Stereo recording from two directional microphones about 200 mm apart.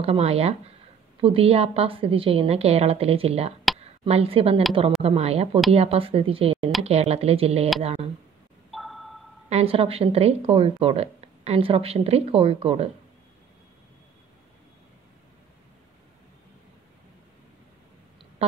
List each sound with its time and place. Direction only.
0.0 s a woman's voice: 30° right (ahead or behind)
8.7 s a sound: centre (ahead or behind)
9.5 s a woman's voice: 30° right (ahead or behind)